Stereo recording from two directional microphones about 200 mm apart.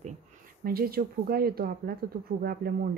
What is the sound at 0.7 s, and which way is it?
Speech, 50° right (ahead or behind).